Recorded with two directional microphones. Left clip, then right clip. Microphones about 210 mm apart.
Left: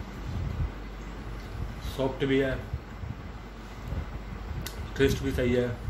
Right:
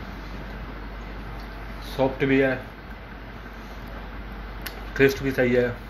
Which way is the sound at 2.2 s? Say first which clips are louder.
Right 5 dB; 5° left (ahead or behind).